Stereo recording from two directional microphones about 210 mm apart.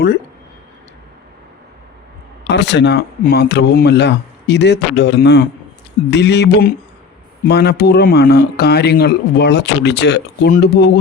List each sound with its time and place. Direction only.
2.5 s speech: 55° left (ahead or behind)